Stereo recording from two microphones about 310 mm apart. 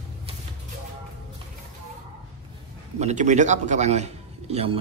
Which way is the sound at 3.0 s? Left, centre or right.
Right.